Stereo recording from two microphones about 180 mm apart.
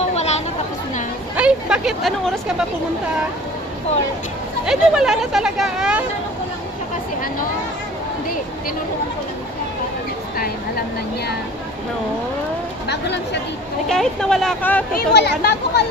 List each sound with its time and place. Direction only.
0.0 s chatter: 35° left (ahead or behind)
1.3 s vehicle: 5° right (ahead or behind)
4.6 s speech: 5° right (ahead or behind)
12.8 s speech: 70° left (ahead or behind)
13.8 s speech: 5° left (ahead or behind)
15.0 s speech: 65° left (ahead or behind)